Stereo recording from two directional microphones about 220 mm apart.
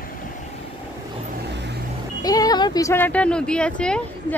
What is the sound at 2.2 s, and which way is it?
Speech, 15° left (ahead or behind).